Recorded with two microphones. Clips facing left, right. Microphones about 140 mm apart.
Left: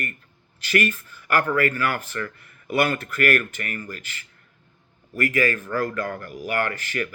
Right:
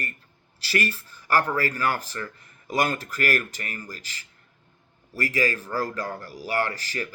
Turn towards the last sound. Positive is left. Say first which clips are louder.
# left 2 dB
turn(degrees=-35)  # may be behind; listen again after turning